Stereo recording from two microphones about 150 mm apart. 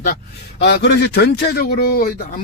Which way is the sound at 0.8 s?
90° left.